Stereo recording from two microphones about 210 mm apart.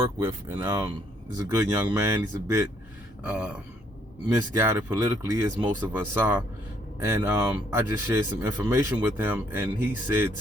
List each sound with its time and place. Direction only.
0.2 s speech: 15° right (ahead or behind)
4.5 s speech: 15° right (ahead or behind)